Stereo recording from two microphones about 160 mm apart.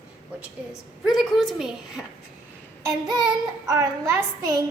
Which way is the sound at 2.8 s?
25° right (ahead or behind).